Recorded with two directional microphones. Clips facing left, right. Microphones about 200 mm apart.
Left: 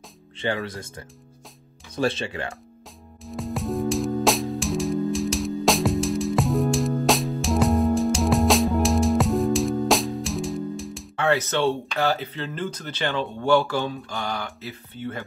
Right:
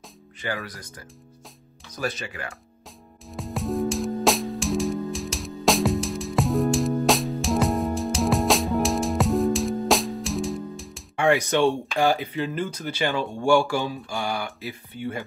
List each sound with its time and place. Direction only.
0.4 s speech: 25° left (ahead or behind)
3.3 s music: centre (ahead or behind)
11.1 s speech: 15° right (ahead or behind)